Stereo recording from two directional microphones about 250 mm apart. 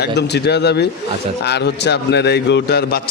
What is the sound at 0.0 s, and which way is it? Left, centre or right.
A man's voice, left.